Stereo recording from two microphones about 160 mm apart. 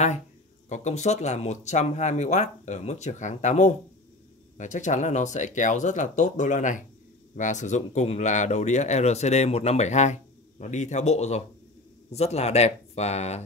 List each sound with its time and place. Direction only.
0.7 s speech: 45° left (ahead or behind)